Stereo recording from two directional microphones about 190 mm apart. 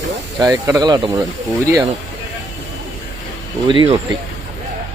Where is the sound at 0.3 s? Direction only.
20° right (ahead or behind).